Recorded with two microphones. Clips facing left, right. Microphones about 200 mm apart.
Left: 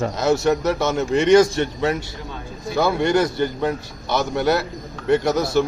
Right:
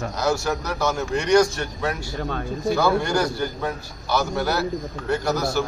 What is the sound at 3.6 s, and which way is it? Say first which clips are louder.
Speech: left 4 dB; 20° left (ahead or behind).